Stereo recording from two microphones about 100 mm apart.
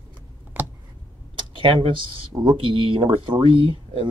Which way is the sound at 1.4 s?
60° right (ahead or behind).